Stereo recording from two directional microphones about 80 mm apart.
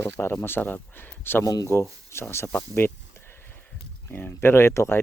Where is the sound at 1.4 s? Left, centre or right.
Left.